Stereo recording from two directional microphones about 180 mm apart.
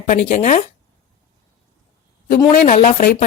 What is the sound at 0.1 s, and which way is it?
Speech, 40° left (ahead or behind).